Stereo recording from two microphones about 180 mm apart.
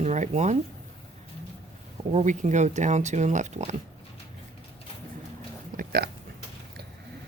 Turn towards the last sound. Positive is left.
turn(degrees=-55)  # may be behind; listen again after turning